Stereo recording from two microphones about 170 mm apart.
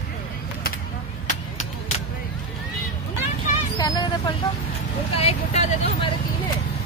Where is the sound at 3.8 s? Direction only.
25° left (ahead or behind).